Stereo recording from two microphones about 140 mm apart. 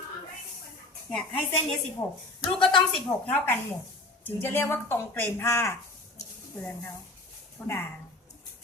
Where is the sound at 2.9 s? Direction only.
10° left (ahead or behind).